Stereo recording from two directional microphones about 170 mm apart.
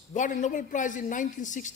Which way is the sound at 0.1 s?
50° left (ahead or behind).